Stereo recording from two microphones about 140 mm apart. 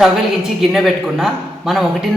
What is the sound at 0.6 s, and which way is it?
Speech, centre (ahead or behind).